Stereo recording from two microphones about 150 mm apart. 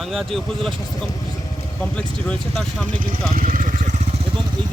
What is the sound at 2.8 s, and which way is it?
Speech, 10° left (ahead or behind).